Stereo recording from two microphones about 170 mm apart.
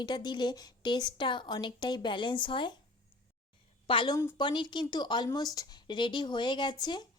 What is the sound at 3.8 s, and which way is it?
A woman's voice, 30° left (ahead or behind).